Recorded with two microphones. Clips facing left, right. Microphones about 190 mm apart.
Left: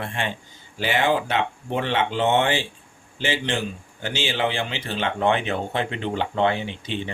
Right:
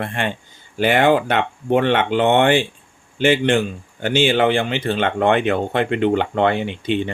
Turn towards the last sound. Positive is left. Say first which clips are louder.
# right 6 dB
turn(degrees=-60)  # may be behind; listen again after turning